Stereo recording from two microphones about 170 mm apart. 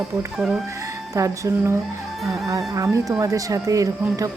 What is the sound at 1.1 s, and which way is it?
Speech, 20° right (ahead or behind).